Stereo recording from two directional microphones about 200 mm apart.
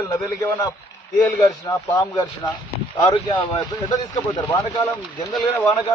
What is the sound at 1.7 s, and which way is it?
A man's voice, 15° left (ahead or behind).